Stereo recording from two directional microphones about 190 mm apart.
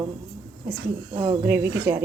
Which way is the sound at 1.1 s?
25° right (ahead or behind).